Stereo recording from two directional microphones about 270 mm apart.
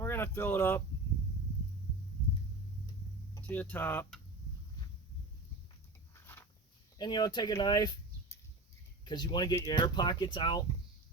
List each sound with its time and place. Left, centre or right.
0.0 s a sound: centre
3.3 s speech: centre
7.0 s speech: centre
9.0 s speech: centre